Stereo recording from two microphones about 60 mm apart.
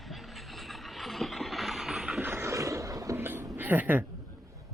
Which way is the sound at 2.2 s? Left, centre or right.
Right.